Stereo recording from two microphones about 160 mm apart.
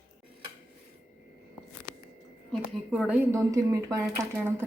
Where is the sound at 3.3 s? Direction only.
20° right (ahead or behind).